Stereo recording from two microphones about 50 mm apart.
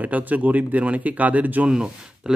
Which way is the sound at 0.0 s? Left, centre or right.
Right.